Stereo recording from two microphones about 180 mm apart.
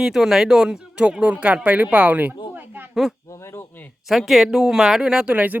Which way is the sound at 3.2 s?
15° left (ahead or behind).